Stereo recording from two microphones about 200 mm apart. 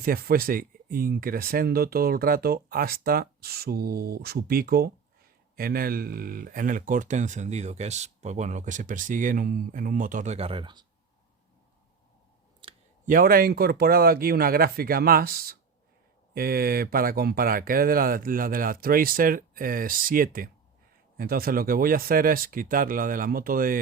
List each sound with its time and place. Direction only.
0.0 s speech: 50° right (ahead or behind); by 10.8 s 25° right (ahead or behind)
12.6 s clicking: 25° right (ahead or behind)
13.1 s speech: 45° right (ahead or behind)